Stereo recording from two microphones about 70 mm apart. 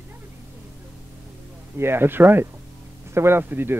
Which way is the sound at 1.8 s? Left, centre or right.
Right.